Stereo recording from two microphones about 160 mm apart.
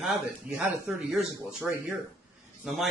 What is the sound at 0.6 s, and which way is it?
A man's voice, 5° right (ahead or behind).